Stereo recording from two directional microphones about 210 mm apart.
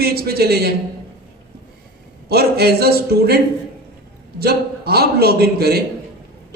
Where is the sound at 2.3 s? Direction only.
50° right (ahead or behind).